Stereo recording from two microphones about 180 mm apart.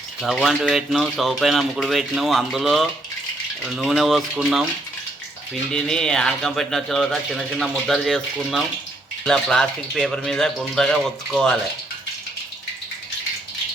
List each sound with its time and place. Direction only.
0.2 s speech: centre (ahead or behind)
5.7 s speech: 5° left (ahead or behind)